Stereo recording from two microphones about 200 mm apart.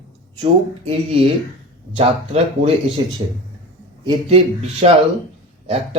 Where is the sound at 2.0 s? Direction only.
30° right (ahead or behind).